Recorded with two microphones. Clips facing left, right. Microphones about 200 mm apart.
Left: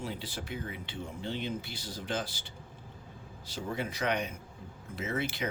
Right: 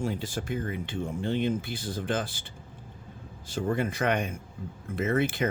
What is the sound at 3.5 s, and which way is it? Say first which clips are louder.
Speech: right 8 dB; 50° right (ahead or behind).